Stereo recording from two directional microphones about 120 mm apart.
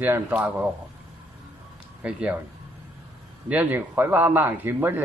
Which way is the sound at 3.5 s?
15° right (ahead or behind).